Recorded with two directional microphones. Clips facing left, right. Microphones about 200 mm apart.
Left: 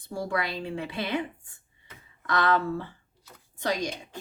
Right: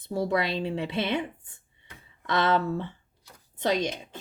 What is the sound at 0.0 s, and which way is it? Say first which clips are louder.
A woman's voice: right 4 dB; 20° right (ahead or behind).